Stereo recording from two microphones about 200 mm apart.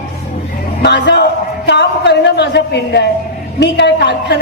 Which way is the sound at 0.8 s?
60° left (ahead or behind).